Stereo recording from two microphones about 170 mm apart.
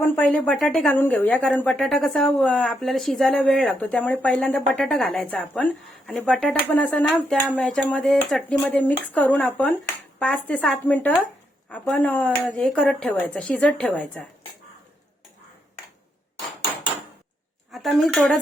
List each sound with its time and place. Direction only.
0.0 s a woman's voice: 10° left (ahead or behind)
17.7 s a woman's voice: centre (ahead or behind)